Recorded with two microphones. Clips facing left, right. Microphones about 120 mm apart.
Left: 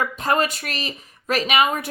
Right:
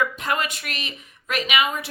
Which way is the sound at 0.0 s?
35° left (ahead or behind).